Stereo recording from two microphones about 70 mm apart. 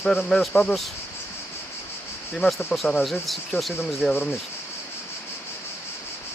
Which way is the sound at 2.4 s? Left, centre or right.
Left.